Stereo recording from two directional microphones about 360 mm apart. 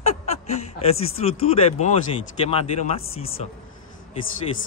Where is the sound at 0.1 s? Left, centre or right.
Centre.